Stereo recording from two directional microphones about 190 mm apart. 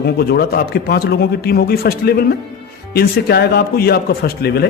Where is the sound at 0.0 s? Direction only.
55° left (ahead or behind).